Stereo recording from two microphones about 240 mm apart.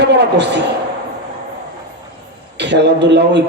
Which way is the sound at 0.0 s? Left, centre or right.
Right.